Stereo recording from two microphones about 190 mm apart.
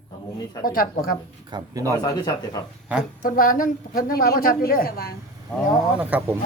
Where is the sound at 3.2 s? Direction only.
50° left (ahead or behind).